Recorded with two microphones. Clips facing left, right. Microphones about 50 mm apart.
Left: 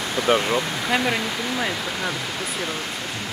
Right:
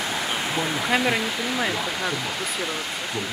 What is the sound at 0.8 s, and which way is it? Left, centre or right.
Speech, centre.